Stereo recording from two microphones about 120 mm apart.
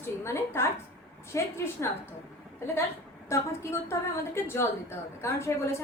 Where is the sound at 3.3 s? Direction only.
20° left (ahead or behind).